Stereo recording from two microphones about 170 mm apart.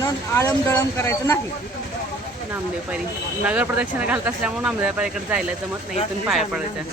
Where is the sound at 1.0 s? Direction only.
15° left (ahead or behind).